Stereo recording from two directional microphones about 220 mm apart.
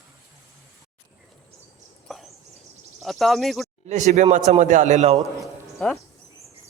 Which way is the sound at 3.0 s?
Centre (ahead or behind).